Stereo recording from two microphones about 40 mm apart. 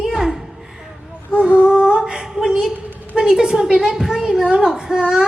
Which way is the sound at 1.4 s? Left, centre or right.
Right.